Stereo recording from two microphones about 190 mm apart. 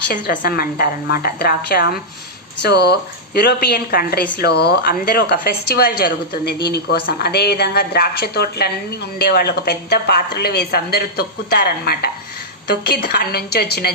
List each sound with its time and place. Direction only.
0.1 s a woman's voice: 55° left (ahead or behind)